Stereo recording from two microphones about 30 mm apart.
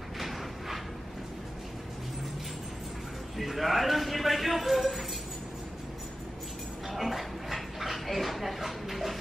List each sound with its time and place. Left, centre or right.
0.2 s a sound: centre
3.3 s speech: centre
7.0 s dog: centre